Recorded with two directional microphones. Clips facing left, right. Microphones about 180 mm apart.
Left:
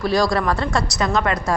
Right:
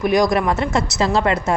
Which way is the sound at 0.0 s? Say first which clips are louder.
Right 2 dB; 20° right (ahead or behind).